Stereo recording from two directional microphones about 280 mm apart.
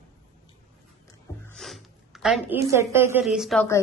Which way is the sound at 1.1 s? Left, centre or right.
Centre.